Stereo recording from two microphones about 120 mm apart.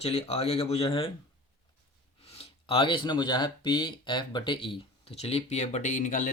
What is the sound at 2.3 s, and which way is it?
Speech, 55° left (ahead or behind).